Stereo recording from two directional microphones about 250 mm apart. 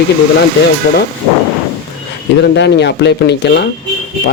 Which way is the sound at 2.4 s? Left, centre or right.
Left.